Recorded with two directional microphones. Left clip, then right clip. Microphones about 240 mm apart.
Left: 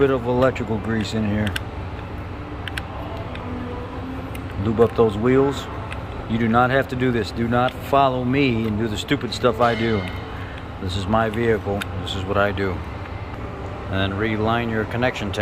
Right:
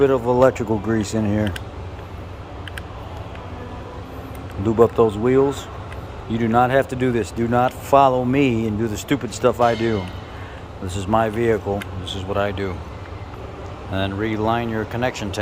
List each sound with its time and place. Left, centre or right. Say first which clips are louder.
0.0 s speech: right 3 dB; centre
4.6 s speech: right 2 dB; centre
13.9 s speech: even; centre